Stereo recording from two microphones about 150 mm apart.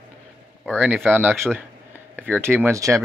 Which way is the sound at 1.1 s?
10° right (ahead or behind).